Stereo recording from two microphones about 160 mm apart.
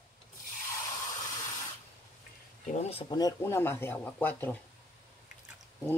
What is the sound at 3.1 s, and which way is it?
Speech, 20° left (ahead or behind).